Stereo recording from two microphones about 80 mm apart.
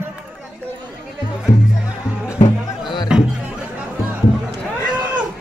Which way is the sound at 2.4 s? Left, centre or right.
Left.